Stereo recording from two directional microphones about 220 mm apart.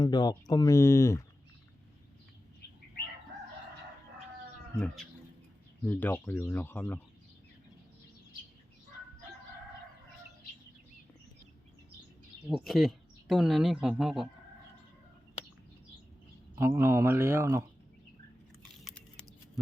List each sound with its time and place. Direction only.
0.0 s speech: 20° left (ahead or behind)
5.8 s speech: 10° left (ahead or behind)
12.5 s speech: centre (ahead or behind)
16.6 s speech: 10° right (ahead or behind)
18.7 s a sound: centre (ahead or behind)